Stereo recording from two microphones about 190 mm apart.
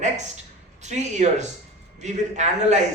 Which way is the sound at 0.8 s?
40° right (ahead or behind).